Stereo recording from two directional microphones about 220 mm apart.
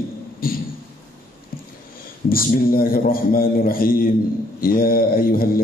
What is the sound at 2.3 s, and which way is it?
Mantra, 40° left (ahead or behind).